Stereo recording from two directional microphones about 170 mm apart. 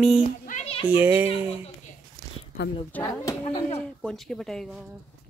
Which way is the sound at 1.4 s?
35° left (ahead or behind).